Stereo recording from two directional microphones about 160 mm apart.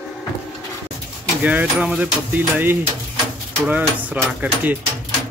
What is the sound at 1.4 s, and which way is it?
Speech, 10° right (ahead or behind).